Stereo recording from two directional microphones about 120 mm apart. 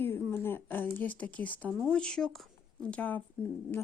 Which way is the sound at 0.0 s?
20° left (ahead or behind).